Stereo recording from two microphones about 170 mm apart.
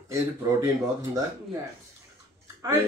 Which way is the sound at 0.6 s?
20° right (ahead or behind).